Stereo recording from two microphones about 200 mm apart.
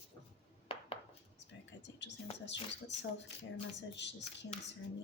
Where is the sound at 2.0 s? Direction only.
60° left (ahead or behind).